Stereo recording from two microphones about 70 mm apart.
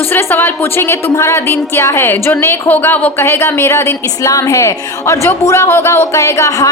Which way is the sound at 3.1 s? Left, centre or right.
Left.